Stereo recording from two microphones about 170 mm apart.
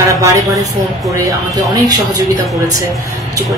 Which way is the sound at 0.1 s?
20° right (ahead or behind).